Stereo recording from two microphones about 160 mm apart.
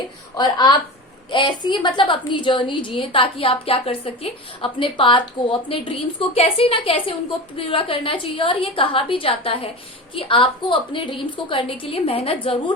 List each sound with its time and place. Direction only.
0.3 s a woman's voice: 25° left (ahead or behind)